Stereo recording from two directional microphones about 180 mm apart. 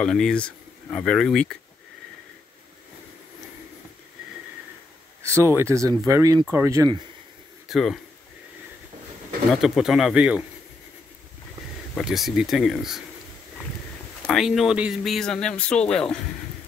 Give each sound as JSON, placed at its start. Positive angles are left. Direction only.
{"t": 0.0, "sound": "speech", "side_deg": 5}
{"t": 5.2, "sound": "speech", "side_deg": -15}
{"t": 7.6, "sound": "speech", "side_deg": 0}
{"t": 9.5, "sound": "speech", "side_deg": 0}
{"t": 11.9, "sound": "speech", "side_deg": 0}
{"t": 14.2, "sound": "speech", "side_deg": 0}